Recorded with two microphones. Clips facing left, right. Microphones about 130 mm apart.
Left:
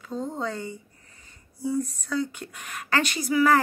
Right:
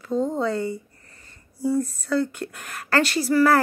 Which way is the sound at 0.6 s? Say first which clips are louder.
Right 8 dB; 80° right.